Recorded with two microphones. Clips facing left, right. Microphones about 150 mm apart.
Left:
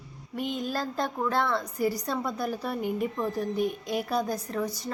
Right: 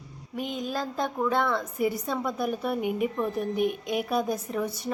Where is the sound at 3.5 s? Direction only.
60° right (ahead or behind).